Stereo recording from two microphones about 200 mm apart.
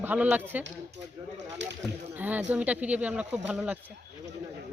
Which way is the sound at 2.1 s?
10° right (ahead or behind).